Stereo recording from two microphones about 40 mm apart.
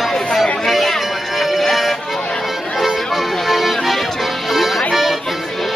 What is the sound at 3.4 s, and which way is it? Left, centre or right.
Music, centre.